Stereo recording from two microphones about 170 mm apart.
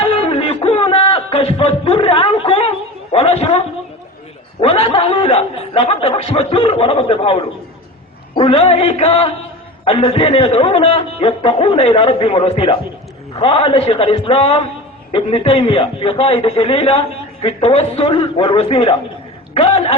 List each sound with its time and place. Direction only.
0.0 s a sound: 35° left (ahead or behind)
4.6 s a man's voice: 35° left (ahead or behind)
8.4 s a man's voice: 35° left (ahead or behind)